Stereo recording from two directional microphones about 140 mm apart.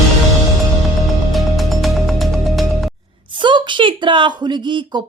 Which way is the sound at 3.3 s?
35° right (ahead or behind).